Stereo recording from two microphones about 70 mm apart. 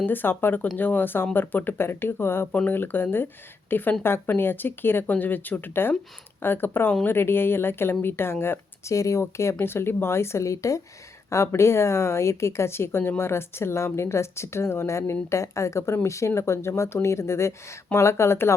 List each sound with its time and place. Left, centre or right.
0.0 s speech: left
9.6 s speech: left